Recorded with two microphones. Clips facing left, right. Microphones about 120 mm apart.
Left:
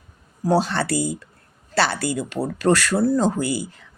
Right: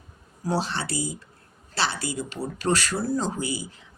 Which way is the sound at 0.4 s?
50° left (ahead or behind).